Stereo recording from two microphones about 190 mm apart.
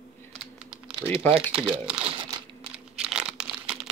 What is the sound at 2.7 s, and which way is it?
Crumpling, 5° right (ahead or behind).